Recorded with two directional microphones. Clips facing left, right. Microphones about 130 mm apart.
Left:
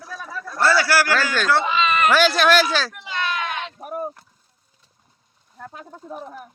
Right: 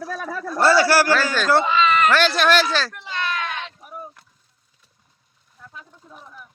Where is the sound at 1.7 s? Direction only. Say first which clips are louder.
Right 1 dB; 20° left (ahead or behind).